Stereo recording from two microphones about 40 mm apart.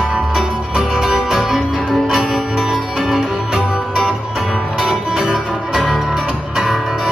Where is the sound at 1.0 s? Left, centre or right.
Centre.